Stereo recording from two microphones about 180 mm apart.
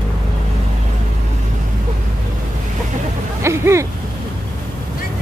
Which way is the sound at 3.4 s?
15° right (ahead or behind).